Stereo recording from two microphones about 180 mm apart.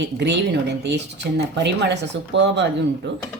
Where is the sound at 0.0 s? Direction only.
75° right (ahead or behind).